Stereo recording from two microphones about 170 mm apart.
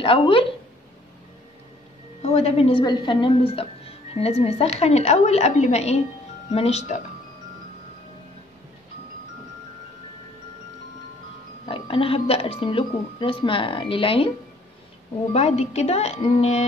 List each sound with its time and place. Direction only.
0.0 s speech: 30° left (ahead or behind)
2.2 s a woman's voice: 40° left (ahead or behind)
11.6 s speech: 35° left (ahead or behind)
15.3 s speech: 40° left (ahead or behind)